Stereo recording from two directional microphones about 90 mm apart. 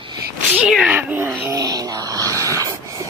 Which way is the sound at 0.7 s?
15° right (ahead or behind).